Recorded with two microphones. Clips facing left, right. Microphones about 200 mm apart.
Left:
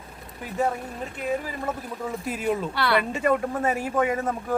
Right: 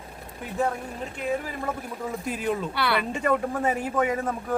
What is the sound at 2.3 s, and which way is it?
Speech, centre (ahead or behind).